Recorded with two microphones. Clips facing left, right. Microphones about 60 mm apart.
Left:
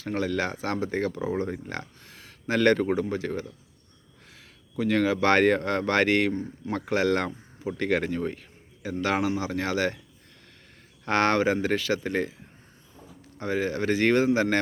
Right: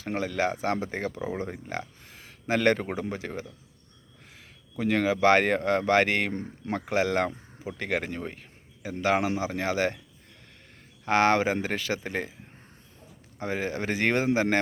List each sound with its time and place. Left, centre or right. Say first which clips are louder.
0.0 s speech: even; centre
4.8 s a man's voice: even; centre
11.0 s speech: even; centre
13.4 s speech: left 3 dB; right